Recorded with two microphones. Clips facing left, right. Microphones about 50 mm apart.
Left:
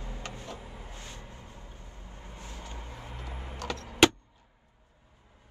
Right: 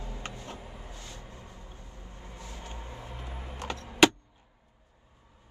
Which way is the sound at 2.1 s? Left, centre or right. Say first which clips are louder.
Even; left.